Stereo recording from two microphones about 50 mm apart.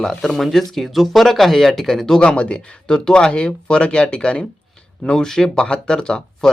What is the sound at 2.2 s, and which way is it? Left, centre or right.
Speech, left.